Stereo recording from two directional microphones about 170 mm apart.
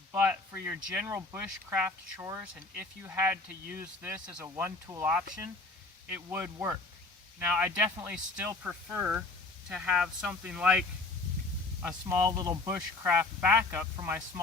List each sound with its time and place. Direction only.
0.2 s speech: 10° right (ahead or behind)
11.8 s speech: 15° right (ahead or behind)